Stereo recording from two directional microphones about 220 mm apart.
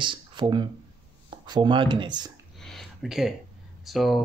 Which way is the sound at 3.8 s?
Centre (ahead or behind).